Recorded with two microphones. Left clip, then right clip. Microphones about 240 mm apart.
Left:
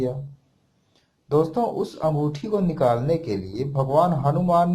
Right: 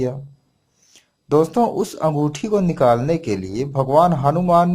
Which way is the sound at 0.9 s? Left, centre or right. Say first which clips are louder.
Right 11 dB; right.